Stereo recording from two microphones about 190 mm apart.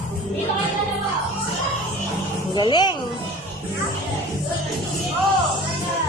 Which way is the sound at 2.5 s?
25° left (ahead or behind).